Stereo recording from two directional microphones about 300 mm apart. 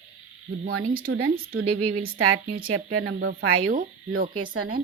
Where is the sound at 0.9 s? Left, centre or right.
Right.